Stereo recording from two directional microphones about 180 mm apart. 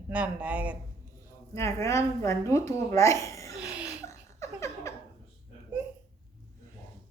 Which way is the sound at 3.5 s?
5° right (ahead or behind).